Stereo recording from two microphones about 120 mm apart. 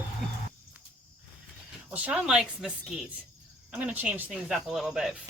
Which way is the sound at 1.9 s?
10° right (ahead or behind).